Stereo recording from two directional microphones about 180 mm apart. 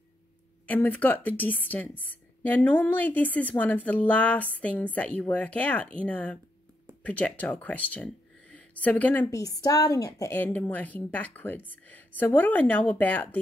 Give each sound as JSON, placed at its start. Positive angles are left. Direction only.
{"t": 0.7, "sound": "a woman's voice", "side_deg": 10}
{"t": 9.4, "sound": "a woman's voice", "side_deg": 20}